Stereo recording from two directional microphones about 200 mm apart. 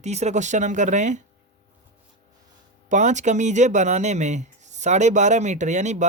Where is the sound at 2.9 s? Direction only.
35° right (ahead or behind).